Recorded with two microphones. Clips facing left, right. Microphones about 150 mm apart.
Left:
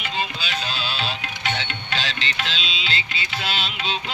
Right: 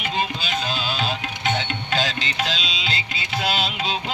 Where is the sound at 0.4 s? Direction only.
50° right (ahead or behind).